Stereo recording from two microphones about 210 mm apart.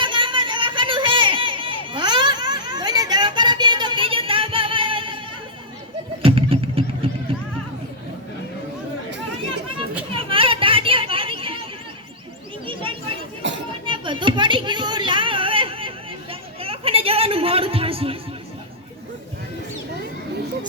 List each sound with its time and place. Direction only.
0.0 s a sound: 25° right (ahead or behind)
6.2 s wild animals: 25° right (ahead or behind)
10.2 s children playing: 25° right (ahead or behind)
12.6 s children playing: 25° right (ahead or behind)
13.4 s chatter: 60° right (ahead or behind)
13.8 s a sound: 25° right (ahead or behind)